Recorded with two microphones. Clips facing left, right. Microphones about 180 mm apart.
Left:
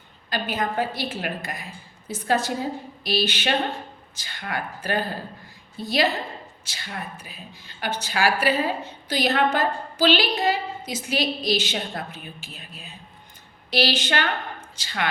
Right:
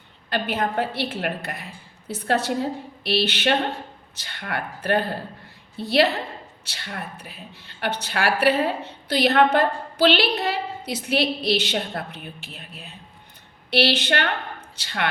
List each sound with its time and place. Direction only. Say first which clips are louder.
0.3 s speech: right 2 dB; 60° right (ahead or behind)